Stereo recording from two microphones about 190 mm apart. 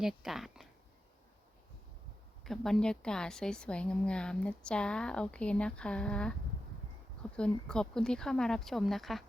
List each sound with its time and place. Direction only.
0.0 s a woman's voice: centre (ahead or behind)
2.4 s a woman's voice: centre (ahead or behind)
7.3 s a woman's voice: 5° left (ahead or behind)